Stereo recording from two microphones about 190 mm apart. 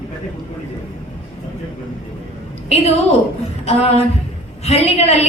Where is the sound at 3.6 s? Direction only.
30° left (ahead or behind).